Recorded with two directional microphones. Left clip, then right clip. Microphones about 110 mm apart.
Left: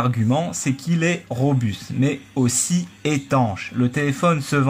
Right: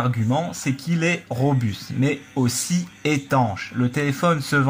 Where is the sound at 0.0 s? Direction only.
35° left (ahead or behind).